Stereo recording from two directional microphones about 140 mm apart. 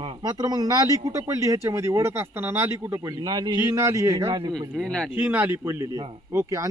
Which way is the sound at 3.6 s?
20° right (ahead or behind).